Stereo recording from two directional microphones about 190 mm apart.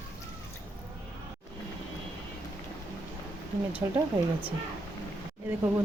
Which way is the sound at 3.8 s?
15° right (ahead or behind).